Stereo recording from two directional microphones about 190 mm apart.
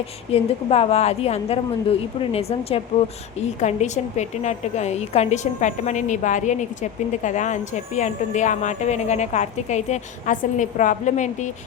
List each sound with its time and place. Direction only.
0.3 s a woman's voice: 30° left (ahead or behind)